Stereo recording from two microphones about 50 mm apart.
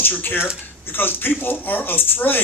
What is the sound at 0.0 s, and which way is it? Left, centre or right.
Speech, left.